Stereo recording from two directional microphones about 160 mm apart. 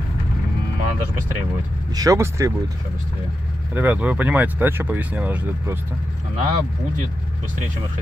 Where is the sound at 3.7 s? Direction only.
10° right (ahead or behind).